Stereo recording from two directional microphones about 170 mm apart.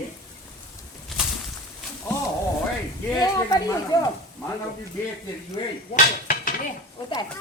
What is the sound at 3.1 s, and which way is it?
Speech, 20° left (ahead or behind).